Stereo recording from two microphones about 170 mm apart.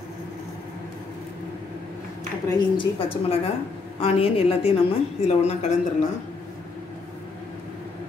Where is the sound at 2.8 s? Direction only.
35° left (ahead or behind).